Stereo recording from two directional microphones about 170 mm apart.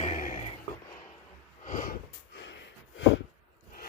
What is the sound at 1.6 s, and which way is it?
Snort, 50° left (ahead or behind).